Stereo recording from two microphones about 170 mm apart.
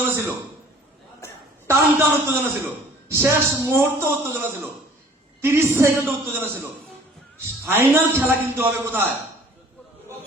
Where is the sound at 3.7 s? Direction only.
15° right (ahead or behind).